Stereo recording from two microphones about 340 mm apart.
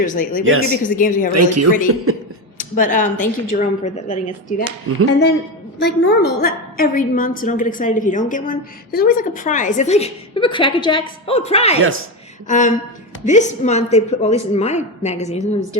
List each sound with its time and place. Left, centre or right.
0.0 s a woman's voice: left
0.4 s speech: right
0.9 s a woman's voice: left
1.3 s speech: right
2.6 s a woman's voice: left
5.8 s a woman's voice: left